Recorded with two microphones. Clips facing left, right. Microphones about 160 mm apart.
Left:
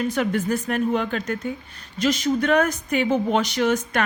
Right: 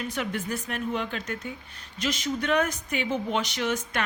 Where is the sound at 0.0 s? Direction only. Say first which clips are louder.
Left 8 dB; 45° left (ahead or behind).